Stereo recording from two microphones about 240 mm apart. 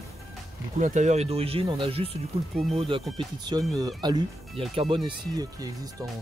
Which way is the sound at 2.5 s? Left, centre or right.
Centre.